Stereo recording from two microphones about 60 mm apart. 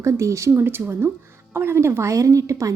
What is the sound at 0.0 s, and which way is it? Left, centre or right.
Speech, right.